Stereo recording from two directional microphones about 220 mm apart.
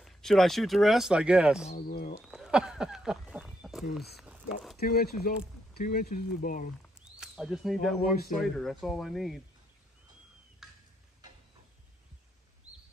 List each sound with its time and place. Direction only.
0.0 s speech: centre (ahead or behind)
1.7 s speech: 40° left (ahead or behind)
2.2 s a sound: centre (ahead or behind)
4.7 s speech: 45° left (ahead or behind)
7.1 s speech: centre (ahead or behind)
10.6 s a sound: centre (ahead or behind)